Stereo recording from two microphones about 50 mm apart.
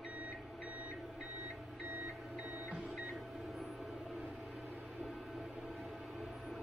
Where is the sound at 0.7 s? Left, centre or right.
Right.